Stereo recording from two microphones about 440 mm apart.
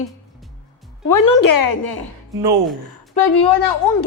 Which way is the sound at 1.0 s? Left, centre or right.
Left.